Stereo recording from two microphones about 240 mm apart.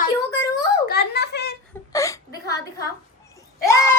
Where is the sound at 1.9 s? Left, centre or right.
Centre.